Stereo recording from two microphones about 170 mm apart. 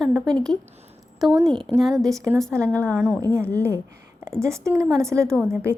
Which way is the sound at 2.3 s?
5° left (ahead or behind).